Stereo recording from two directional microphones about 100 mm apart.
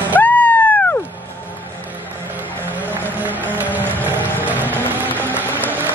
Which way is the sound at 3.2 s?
15° right (ahead or behind).